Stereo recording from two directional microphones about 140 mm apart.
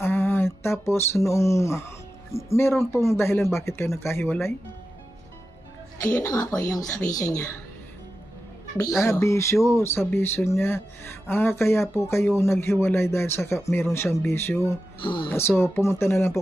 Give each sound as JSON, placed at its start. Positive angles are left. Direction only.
{"t": 0.0, "sound": "speech", "side_deg": 15}
{"t": 6.1, "sound": "speech", "side_deg": 20}
{"t": 9.0, "sound": "speech", "side_deg": 20}
{"t": 15.0, "sound": "speech", "side_deg": 35}
{"t": 15.3, "sound": "speech", "side_deg": 15}